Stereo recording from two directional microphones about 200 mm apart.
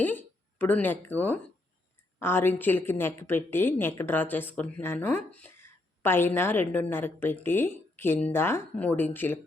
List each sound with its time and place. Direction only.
0.0 s a woman's voice: 10° left (ahead or behind)